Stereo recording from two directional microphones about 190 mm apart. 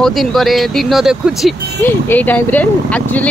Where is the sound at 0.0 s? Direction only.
Centre (ahead or behind).